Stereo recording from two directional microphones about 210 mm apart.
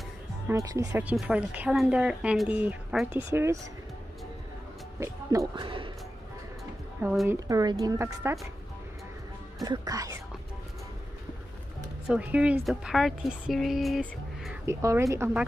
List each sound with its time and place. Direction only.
0.5 s speech: 15° right (ahead or behind)
5.0 s speech: 15° right (ahead or behind)
5.6 s speech: 25° right (ahead or behind)
7.0 s speech: 5° right (ahead or behind)
7.3 s speech: 15° right (ahead or behind)
9.6 s speech: 15° right (ahead or behind)
12.1 s speech: 5° right (ahead or behind)
14.7 s speech: 15° right (ahead or behind)